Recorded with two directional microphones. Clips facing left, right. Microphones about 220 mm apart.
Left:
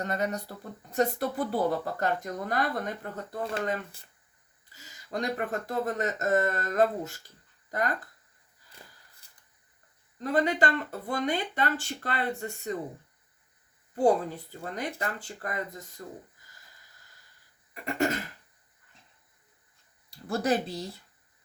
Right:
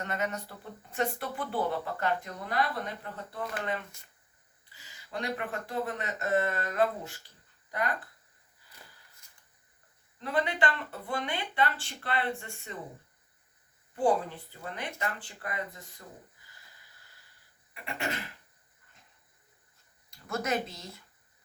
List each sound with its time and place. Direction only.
0.0 s speech: 35° left (ahead or behind)
10.2 s speech: 40° left (ahead or behind)
13.9 s speech: 40° left (ahead or behind)
17.8 s speech: 45° left (ahead or behind)
20.1 s speech: 35° left (ahead or behind)